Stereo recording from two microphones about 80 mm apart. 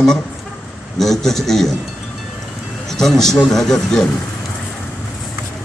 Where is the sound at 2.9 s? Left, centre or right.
Centre.